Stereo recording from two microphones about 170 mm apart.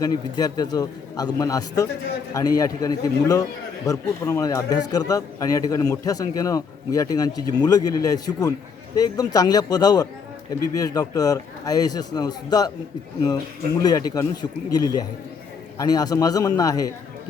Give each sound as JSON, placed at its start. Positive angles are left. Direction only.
{"t": 0.0, "sound": "speech", "side_deg": 20}
{"t": 13.8, "sound": "speech", "side_deg": 20}